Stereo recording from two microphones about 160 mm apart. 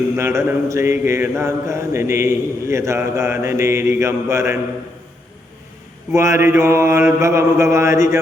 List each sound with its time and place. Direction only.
0.2 s speech: 15° right (ahead or behind)
6.1 s speech: 15° right (ahead or behind)